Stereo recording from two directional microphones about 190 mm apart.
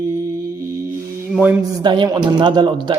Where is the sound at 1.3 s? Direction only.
10° right (ahead or behind).